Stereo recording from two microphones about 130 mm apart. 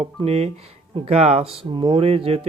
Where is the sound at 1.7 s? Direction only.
40° right (ahead or behind).